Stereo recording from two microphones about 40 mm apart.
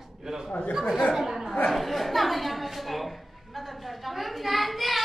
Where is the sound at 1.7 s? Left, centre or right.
Centre.